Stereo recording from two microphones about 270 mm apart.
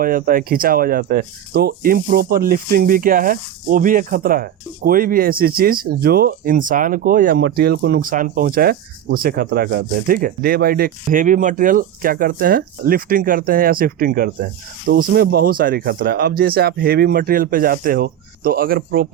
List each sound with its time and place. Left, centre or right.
0.0 s speech: right